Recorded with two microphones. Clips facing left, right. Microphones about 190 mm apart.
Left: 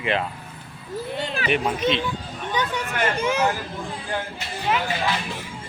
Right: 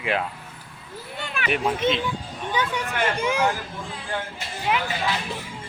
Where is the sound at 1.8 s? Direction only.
25° right (ahead or behind).